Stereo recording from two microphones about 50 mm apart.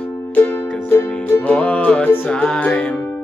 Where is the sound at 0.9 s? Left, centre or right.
Left.